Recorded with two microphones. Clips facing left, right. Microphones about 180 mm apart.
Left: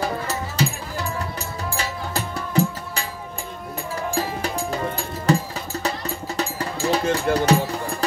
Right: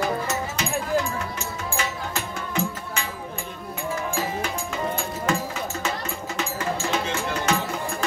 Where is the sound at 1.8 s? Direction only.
35° left (ahead or behind).